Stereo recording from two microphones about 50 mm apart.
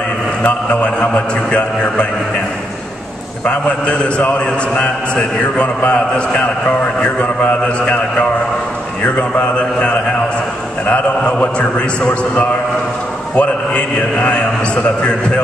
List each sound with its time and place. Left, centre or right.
0.4 s a man's voice: left
3.4 s a man's voice: left
9.6 s a man's voice: centre